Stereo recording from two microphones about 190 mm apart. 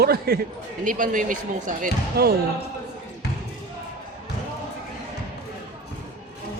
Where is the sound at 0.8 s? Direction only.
45° right (ahead or behind).